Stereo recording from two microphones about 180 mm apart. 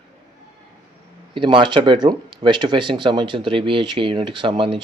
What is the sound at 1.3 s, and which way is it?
Speech, 30° right (ahead or behind).